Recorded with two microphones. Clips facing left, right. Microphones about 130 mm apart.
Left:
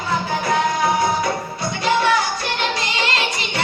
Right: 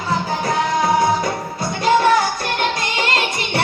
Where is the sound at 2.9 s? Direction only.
50° right (ahead or behind).